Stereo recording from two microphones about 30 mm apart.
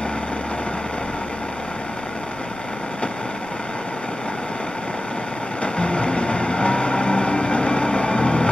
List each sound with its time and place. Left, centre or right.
5.6 s vehicle: left